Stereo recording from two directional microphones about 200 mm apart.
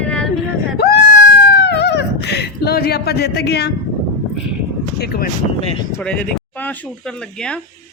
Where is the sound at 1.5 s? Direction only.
55° left (ahead or behind).